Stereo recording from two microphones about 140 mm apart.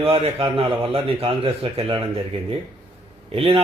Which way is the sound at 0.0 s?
45° right (ahead or behind).